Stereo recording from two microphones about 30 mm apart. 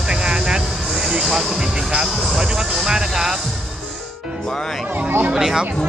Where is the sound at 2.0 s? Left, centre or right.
Centre.